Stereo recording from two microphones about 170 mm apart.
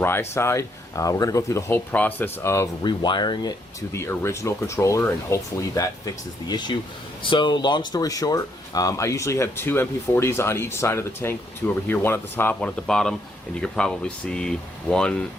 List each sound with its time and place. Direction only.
0.0 s speech: 15° left (ahead or behind)